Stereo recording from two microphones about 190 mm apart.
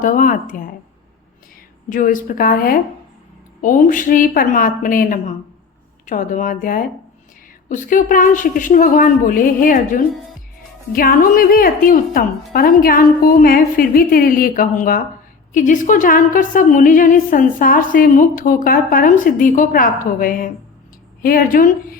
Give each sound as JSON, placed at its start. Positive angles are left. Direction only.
{"t": 0.0, "sound": "a woman's voice", "side_deg": 45}
{"t": 1.9, "sound": "a woman's voice", "side_deg": 45}